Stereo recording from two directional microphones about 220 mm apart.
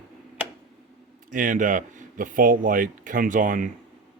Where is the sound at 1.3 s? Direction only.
35° right (ahead or behind).